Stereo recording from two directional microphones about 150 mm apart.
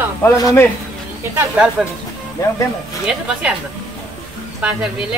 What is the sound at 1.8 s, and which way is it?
Speech, centre (ahead or behind).